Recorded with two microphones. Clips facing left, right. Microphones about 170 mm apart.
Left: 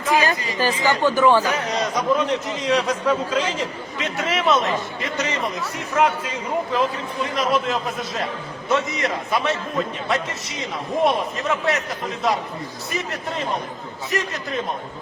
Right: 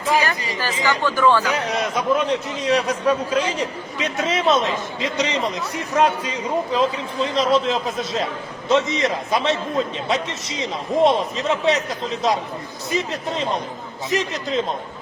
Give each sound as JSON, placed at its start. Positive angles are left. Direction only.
{"t": 0.1, "sound": "speech", "side_deg": 15}
{"t": 1.8, "sound": "a man's voice", "side_deg": -5}
{"t": 14.1, "sound": "a man's voice", "side_deg": -20}